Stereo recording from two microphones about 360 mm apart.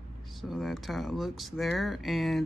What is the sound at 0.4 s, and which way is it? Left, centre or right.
Speech, centre.